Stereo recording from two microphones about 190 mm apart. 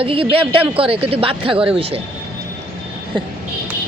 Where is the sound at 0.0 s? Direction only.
30° right (ahead or behind).